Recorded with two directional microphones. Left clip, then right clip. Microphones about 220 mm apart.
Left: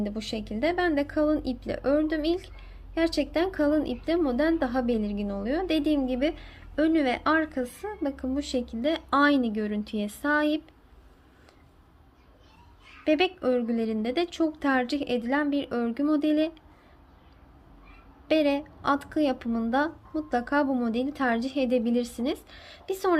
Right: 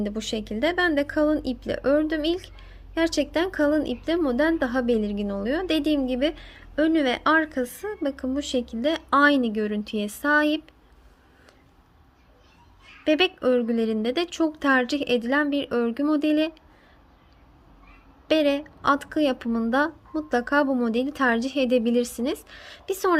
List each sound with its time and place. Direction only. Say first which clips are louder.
0.0 s speech: right 4 dB; 20° right (ahead or behind)
13.1 s speech: right 3 dB; 20° right (ahead or behind)
18.3 s speech: right 3 dB; 20° right (ahead or behind)